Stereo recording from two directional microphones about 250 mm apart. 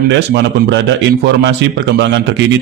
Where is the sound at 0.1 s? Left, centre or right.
Right.